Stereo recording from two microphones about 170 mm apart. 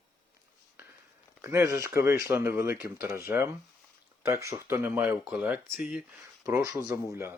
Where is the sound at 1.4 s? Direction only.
15° right (ahead or behind).